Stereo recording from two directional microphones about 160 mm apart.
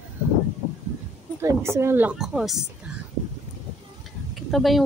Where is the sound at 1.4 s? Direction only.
15° right (ahead or behind).